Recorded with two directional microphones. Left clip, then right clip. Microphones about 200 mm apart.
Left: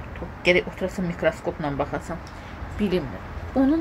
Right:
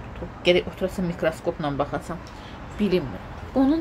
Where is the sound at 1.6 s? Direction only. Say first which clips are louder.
Right 1 dB; 5° right (ahead or behind).